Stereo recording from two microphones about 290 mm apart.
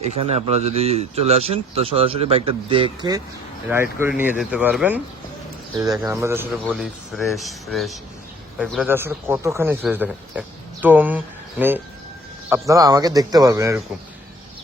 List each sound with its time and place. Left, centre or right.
0.0 s speech: right; by 4.9 s centre
6.0 s speech: centre
12.5 s speech: centre